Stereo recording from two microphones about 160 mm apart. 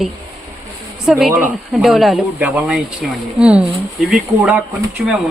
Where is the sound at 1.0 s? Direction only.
Centre (ahead or behind).